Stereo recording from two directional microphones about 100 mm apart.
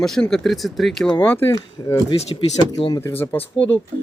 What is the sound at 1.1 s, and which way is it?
Speech, 20° left (ahead or behind).